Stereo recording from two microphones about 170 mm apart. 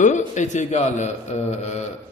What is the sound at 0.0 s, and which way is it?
A man's voice, 45° left (ahead or behind).